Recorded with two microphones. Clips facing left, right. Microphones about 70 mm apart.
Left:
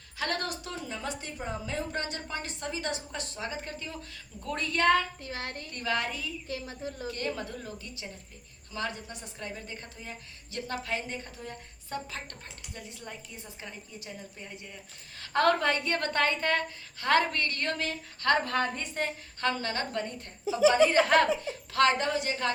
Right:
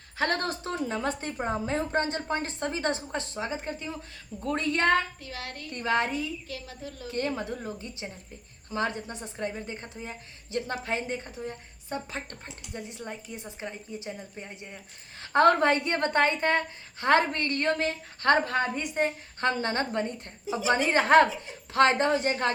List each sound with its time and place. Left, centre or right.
0.2 s a woman's voice: right
5.2 s a woman's voice: left
5.7 s a woman's voice: right
6.5 s a woman's voice: left
7.1 s a woman's voice: right